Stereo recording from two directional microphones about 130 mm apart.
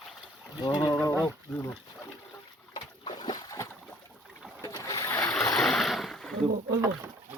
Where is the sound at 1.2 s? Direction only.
15° left (ahead or behind).